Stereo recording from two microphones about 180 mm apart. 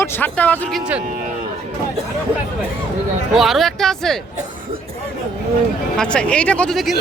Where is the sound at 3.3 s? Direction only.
Centre (ahead or behind).